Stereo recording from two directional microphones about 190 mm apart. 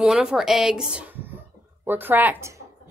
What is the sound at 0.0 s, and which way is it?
Speech, 5° right (ahead or behind).